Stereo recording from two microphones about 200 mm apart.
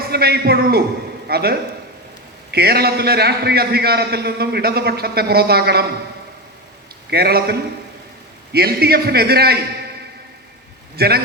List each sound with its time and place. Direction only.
0.0 s a man's voice: 50° right (ahead or behind)
7.1 s a man's voice: 50° right (ahead or behind)
8.5 s a man's voice: 50° right (ahead or behind)
10.9 s a man's voice: 50° right (ahead or behind)